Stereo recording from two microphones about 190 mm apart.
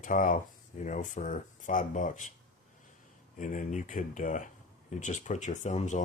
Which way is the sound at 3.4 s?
40° left (ahead or behind).